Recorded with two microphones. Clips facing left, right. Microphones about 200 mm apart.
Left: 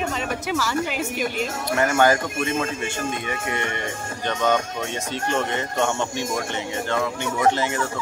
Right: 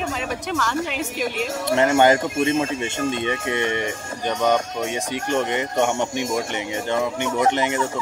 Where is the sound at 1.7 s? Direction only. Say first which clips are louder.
Right 3 dB; 20° right (ahead or behind).